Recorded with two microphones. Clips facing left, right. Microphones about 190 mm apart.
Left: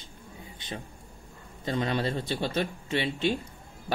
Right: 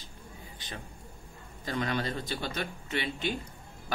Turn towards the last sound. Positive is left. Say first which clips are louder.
# left 5 dB
turn(degrees=25)  # may be behind; listen again after turning